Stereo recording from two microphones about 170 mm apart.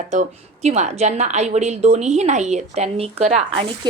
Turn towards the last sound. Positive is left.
turn(degrees=-40)  # may be behind; listen again after turning